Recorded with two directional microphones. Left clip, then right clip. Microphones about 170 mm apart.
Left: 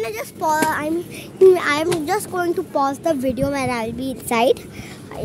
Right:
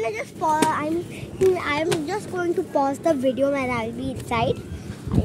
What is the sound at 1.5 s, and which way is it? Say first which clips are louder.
Speech: left 5 dB; 40° left (ahead or behind).